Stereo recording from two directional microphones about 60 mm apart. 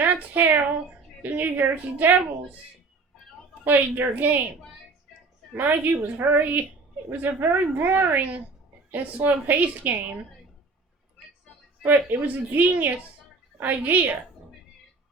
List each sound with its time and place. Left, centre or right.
0.0 s a sound: right
1.2 s a woman's voice: right
3.6 s a woman's voice: right
5.5 s a woman's voice: right
11.9 s a woman's voice: right